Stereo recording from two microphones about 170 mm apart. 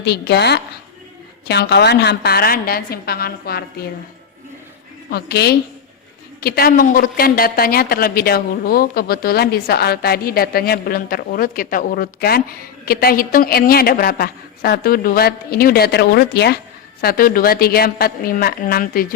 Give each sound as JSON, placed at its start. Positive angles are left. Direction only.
{"t": 0.0, "sound": "a woman's voice", "side_deg": 75}
{"t": 5.1, "sound": "a woman's voice", "side_deg": 70}
{"t": 17.0, "sound": "a woman's voice", "side_deg": 60}